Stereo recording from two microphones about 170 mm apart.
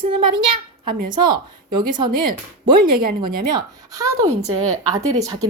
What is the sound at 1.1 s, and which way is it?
Speech, 25° right (ahead or behind).